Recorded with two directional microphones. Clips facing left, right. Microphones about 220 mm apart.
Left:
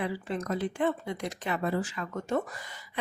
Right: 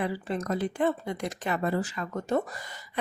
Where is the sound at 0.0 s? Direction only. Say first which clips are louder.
Right 2 dB; 40° right (ahead or behind).